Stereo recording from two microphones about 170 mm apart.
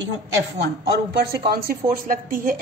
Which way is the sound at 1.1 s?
65° right (ahead or behind).